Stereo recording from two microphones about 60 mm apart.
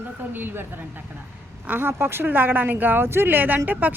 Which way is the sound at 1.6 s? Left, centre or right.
Right.